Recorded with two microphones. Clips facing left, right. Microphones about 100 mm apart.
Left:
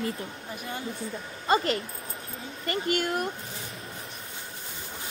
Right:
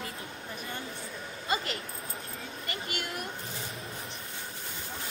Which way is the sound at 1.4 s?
45° left (ahead or behind).